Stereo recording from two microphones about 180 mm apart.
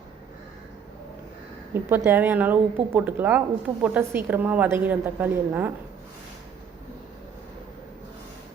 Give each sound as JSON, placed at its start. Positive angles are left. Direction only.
{"t": 1.7, "sound": "a woman's voice", "side_deg": -10}